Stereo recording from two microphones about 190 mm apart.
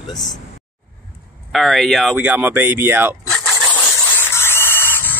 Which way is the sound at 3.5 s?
10° left (ahead or behind).